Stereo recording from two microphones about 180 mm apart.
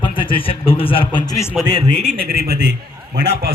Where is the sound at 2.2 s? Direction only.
60° right (ahead or behind).